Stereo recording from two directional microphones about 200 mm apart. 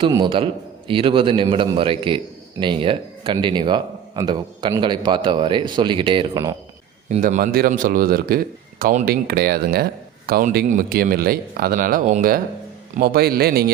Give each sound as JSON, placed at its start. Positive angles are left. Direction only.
{"t": 0.0, "sound": "a man's voice", "side_deg": -25}
{"t": 7.1, "sound": "speech", "side_deg": -40}